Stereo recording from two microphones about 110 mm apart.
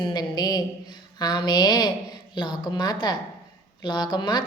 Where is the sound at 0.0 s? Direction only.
40° left (ahead or behind).